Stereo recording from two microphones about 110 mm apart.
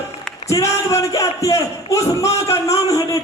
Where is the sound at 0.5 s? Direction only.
30° left (ahead or behind).